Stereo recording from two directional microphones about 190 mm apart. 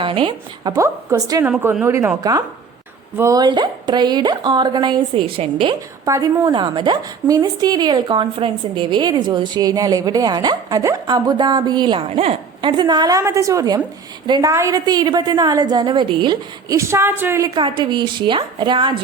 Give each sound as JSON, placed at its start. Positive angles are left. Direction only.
{"t": 0.0, "sound": "a woman's voice", "side_deg": -25}
{"t": 6.1, "sound": "a woman's voice", "side_deg": -20}